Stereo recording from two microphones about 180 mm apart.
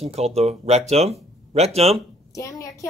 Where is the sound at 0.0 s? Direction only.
35° right (ahead or behind).